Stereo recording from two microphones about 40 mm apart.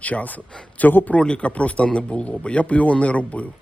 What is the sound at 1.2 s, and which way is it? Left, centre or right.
Speech, left.